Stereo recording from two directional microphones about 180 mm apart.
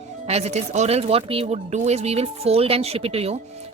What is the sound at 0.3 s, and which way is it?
Speech, 35° right (ahead or behind).